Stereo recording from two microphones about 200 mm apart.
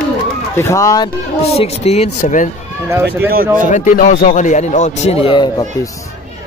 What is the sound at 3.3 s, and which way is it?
Speech, 45° right (ahead or behind).